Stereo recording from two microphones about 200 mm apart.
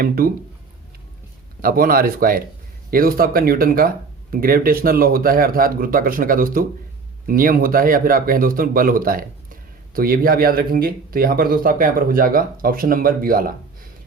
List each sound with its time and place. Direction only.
0.0 s speech: 45° right (ahead or behind)
1.6 s speech: 45° right (ahead or behind)